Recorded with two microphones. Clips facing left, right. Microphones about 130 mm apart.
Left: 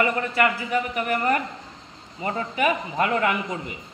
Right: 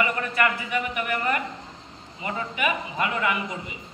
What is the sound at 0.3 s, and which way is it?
A man's voice, 30° left (ahead or behind).